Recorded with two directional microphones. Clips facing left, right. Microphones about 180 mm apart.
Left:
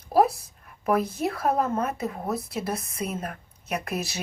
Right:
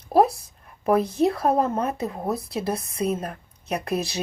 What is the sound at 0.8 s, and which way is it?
Speech, 30° right (ahead or behind).